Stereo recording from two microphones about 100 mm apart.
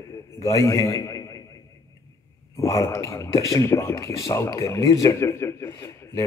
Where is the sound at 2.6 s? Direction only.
35° left (ahead or behind).